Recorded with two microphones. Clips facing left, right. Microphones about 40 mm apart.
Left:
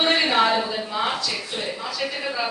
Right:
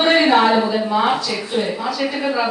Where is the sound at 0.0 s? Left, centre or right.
Centre.